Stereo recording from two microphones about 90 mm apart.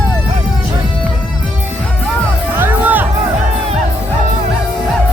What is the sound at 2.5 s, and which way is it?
Music, 25° right (ahead or behind).